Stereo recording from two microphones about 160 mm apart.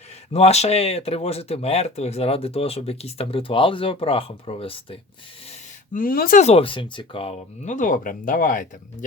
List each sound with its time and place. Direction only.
0.3 s speech: 40° left (ahead or behind)
5.5 s gasp: 60° left (ahead or behind)
6.4 s speech: 35° left (ahead or behind); by 9.0 s 55° left (ahead or behind)